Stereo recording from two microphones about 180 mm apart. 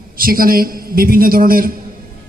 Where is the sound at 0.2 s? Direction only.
55° right (ahead or behind).